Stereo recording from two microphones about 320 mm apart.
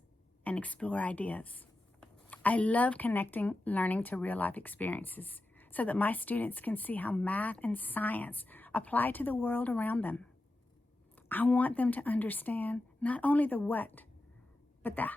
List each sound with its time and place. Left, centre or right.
0.4 s speech: centre
11.3 s speech: centre